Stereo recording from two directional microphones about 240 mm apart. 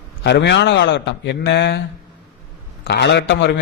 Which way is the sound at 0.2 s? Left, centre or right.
Left.